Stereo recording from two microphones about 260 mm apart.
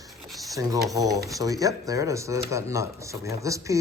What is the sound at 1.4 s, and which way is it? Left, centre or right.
Speech, centre.